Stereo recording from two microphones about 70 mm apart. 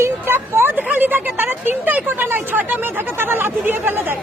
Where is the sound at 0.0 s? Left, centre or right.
Right.